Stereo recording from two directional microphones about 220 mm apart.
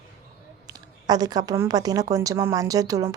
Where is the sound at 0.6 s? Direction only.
15° right (ahead or behind).